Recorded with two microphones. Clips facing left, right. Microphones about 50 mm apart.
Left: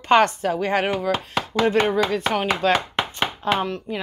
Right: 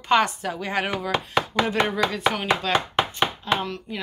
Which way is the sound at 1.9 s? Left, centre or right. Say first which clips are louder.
Left 2 dB; left.